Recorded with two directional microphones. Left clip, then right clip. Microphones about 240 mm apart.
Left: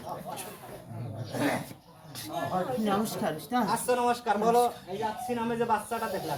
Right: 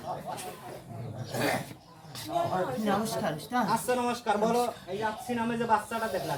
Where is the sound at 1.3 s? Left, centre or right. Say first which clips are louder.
Even; right.